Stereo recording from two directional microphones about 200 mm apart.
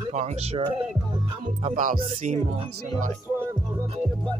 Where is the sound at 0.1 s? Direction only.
35° right (ahead or behind).